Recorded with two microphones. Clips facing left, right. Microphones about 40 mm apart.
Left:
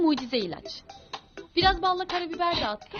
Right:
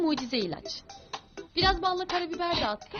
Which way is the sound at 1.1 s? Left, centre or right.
Left.